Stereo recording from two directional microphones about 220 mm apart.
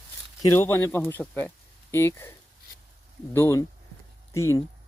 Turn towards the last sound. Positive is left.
turn(degrees=15)  # may be behind; listen again after turning